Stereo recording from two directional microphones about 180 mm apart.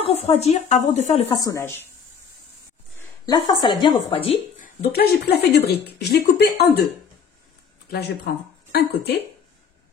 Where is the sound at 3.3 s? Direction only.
25° left (ahead or behind).